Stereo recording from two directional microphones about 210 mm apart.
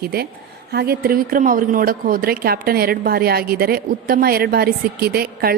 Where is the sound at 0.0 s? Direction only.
45° right (ahead or behind).